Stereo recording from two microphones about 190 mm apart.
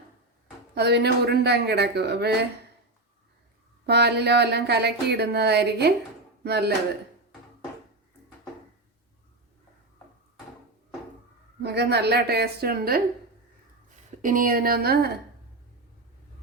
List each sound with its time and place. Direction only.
0.8 s speech: 60° right (ahead or behind)
3.8 s speech: 60° right (ahead or behind)
11.6 s speech: 60° right (ahead or behind)
14.2 s a woman's voice: 45° right (ahead or behind)